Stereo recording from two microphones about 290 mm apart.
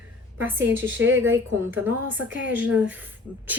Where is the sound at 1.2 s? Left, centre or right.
Centre.